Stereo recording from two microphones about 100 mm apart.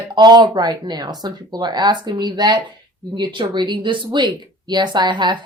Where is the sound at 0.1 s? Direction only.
45° right (ahead or behind).